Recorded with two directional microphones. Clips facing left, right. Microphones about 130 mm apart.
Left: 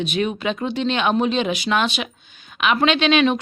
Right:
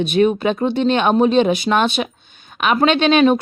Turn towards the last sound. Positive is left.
turn(degrees=-45)  # may be behind; listen again after turning